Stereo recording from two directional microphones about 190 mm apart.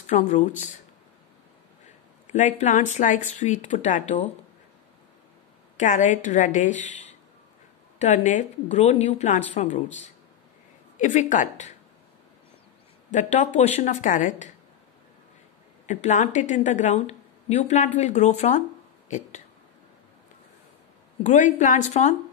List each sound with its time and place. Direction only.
0.0 s speech: 40° left (ahead or behind)
2.2 s speech: 40° left (ahead or behind)
5.8 s speech: 40° left (ahead or behind)
8.0 s speech: 40° left (ahead or behind)
11.0 s speech: 40° left (ahead or behind)
13.1 s speech: 40° left (ahead or behind)
15.9 s speech: 40° left (ahead or behind)
21.3 s speech: 40° left (ahead or behind)